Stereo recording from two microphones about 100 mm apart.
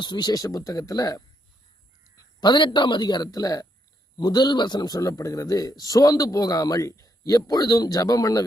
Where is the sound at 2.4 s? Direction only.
50° left (ahead or behind).